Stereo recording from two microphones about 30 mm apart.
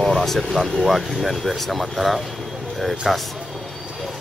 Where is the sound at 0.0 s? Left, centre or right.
Centre.